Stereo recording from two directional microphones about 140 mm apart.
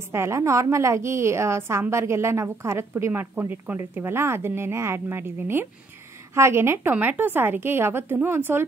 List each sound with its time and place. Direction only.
0.1 s a woman's voice: 20° right (ahead or behind)